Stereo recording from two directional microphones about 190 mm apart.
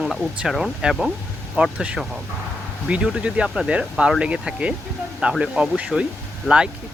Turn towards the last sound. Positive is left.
turn(degrees=-5)  # may be behind; listen again after turning